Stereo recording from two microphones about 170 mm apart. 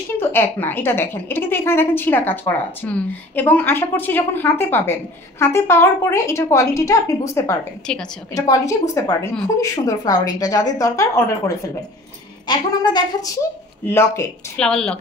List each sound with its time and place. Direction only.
0.2 s a woman's voice: 10° left (ahead or behind)
7.8 s speech: 5° left (ahead or behind)
8.4 s a woman's voice: 20° left (ahead or behind)
14.6 s speech: 5° left (ahead or behind)